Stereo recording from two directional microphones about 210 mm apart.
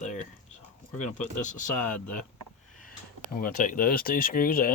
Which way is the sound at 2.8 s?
40° left (ahead or behind).